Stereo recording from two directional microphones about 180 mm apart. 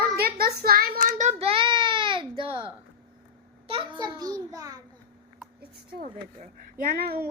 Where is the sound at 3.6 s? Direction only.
30° right (ahead or behind).